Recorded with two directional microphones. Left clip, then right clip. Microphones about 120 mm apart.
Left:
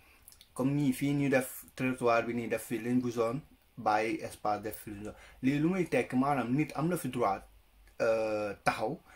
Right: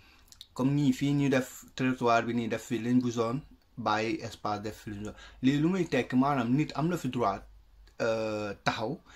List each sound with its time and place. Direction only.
0.3 s speech: 30° right (ahead or behind)